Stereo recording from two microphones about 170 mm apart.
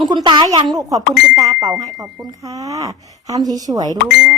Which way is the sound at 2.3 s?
20° right (ahead or behind).